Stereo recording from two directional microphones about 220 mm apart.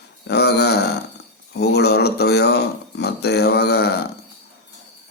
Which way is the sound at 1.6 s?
50° left (ahead or behind).